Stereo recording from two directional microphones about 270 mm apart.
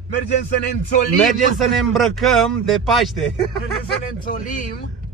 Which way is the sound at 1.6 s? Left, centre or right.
Centre.